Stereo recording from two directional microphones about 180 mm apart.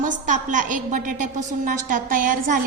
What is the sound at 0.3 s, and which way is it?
A woman's voice, 45° right (ahead or behind).